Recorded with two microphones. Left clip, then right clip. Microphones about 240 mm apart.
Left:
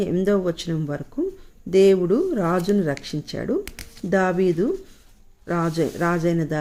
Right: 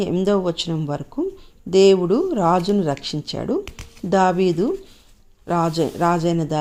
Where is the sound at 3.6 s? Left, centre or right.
Centre.